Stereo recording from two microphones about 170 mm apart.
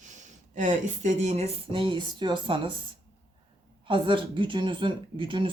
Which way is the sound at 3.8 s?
30° right (ahead or behind).